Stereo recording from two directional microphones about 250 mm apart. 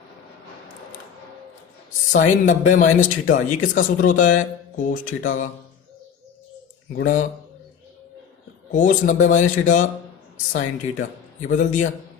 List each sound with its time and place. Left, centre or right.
2.1 s a man's voice: left
7.0 s a man's voice: left
8.7 s a man's voice: left